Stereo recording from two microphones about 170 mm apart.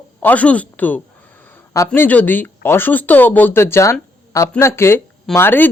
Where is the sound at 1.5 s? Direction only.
20° left (ahead or behind).